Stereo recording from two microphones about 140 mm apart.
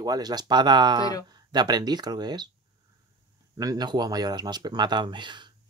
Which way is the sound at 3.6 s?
30° right (ahead or behind).